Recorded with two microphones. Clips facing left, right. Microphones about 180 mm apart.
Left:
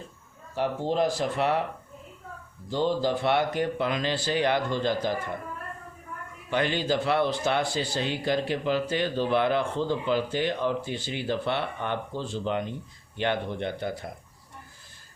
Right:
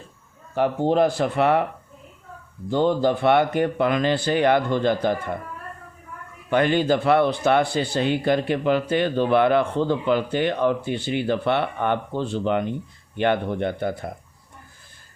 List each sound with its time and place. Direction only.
0.5 s speech: 60° right (ahead or behind)
2.6 s speech: 55° right (ahead or behind)
6.5 s speech: 55° right (ahead or behind)